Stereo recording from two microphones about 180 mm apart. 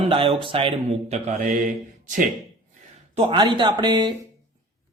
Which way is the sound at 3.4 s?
25° right (ahead or behind).